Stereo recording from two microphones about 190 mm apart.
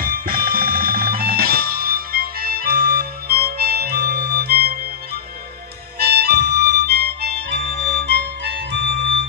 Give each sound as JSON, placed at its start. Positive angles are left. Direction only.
{"t": 0.0, "sound": "music", "side_deg": -50}
{"t": 5.9, "sound": "music", "side_deg": -55}